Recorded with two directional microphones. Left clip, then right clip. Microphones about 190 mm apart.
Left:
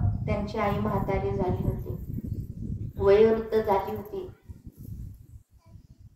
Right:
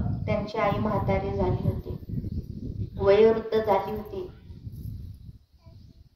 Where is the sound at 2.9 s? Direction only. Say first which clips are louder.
Right 1 dB; 35° right (ahead or behind).